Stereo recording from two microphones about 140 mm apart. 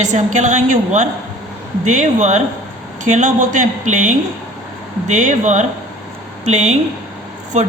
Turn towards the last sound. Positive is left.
turn(degrees=-55)  # may be behind; listen again after turning